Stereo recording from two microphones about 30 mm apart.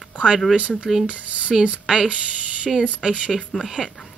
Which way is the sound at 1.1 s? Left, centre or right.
Right.